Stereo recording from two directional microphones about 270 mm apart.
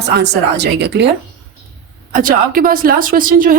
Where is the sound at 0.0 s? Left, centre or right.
Right.